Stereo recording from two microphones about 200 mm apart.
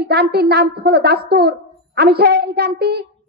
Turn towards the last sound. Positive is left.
turn(degrees=-55)  # may be behind; listen again after turning